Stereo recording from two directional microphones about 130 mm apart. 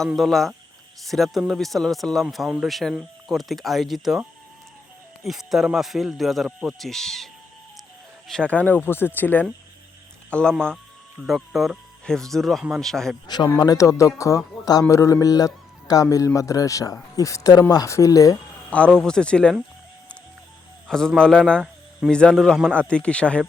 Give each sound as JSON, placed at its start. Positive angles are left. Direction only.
{"t": 0.1, "sound": "speech", "side_deg": 0}
{"t": 8.3, "sound": "speech", "side_deg": 10}
{"t": 13.2, "sound": "a man's voice", "side_deg": 35}
{"t": 18.7, "sound": "speech", "side_deg": 5}
{"t": 20.8, "sound": "a sound", "side_deg": 5}
{"t": 21.2, "sound": "speech", "side_deg": 5}